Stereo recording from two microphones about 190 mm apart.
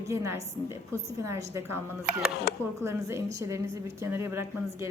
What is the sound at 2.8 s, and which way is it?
A woman's voice, 15° right (ahead or behind).